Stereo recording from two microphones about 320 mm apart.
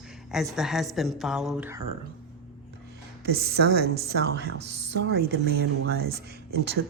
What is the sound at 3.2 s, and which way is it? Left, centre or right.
A woman's voice, right.